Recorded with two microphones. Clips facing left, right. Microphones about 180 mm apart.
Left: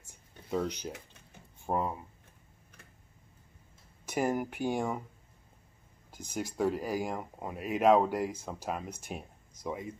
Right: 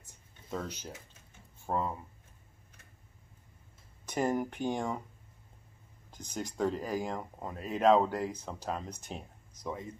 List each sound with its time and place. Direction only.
0.5 s speech: 15° left (ahead or behind)
4.0 s speech: 10° left (ahead or behind)
6.0 s speech: 10° left (ahead or behind)